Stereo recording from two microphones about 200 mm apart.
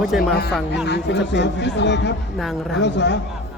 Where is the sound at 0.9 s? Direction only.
60° left (ahead or behind).